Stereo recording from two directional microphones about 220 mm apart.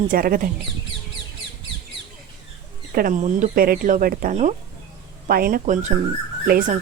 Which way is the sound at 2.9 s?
40° right (ahead or behind).